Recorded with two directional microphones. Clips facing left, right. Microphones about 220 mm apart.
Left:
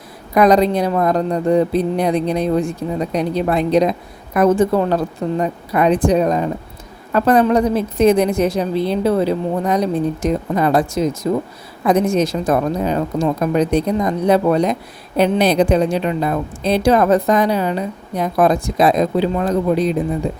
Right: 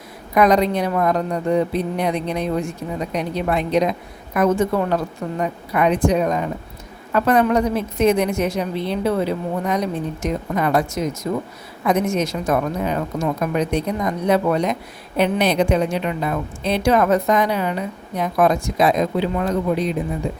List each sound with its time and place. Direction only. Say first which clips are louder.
0.3 s speech: left 3 dB; 35° left (ahead or behind)